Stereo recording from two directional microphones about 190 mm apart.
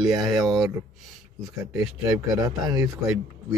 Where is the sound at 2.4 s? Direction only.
20° right (ahead or behind).